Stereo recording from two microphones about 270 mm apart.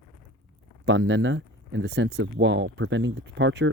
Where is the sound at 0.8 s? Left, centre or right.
Right.